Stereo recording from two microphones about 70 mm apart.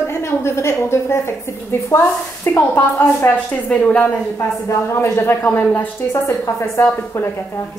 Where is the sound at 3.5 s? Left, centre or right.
Left.